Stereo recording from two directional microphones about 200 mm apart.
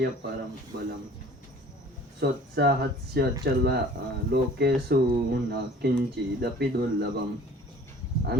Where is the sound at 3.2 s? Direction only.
50° right (ahead or behind).